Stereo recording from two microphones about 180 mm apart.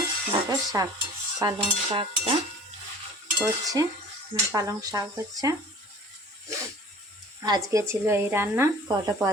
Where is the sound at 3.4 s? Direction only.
20° right (ahead or behind).